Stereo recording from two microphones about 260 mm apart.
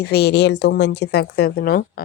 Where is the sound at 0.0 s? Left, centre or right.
Left.